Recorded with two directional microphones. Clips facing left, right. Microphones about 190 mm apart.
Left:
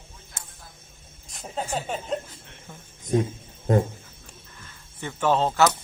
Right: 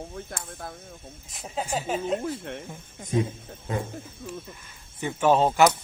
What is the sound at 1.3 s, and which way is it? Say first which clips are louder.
Speech: even; centre (ahead or behind).